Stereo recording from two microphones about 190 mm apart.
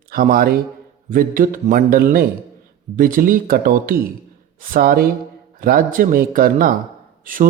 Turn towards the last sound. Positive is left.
turn(degrees=-45)  # may be behind; listen again after turning